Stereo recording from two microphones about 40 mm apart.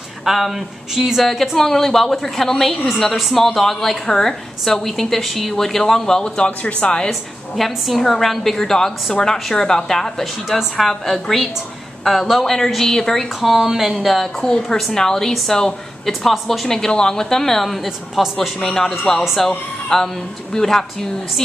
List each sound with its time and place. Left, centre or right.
0.2 s speech: centre
1.2 s a woman's voice: centre; by 7.1 s left
7.1 s a woman's voice: centre
13.4 s a woman's voice: centre
16.1 s a woman's voice: centre
17.8 s speech: centre
18.6 s a woman's voice: centre